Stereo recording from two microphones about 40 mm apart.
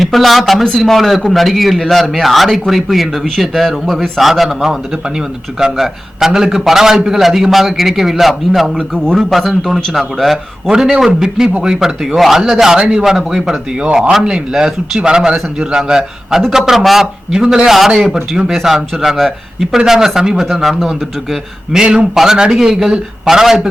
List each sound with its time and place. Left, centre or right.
0.0 s a man's voice: centre
10.7 s speech: centre
12.7 s speech: right
13.8 s a man's voice: right; by 17.1 s centre
17.3 s speech: centre